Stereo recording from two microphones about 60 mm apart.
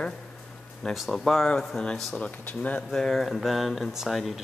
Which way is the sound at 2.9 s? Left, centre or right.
Centre.